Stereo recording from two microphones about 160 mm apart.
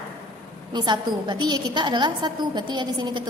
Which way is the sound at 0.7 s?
25° right (ahead or behind).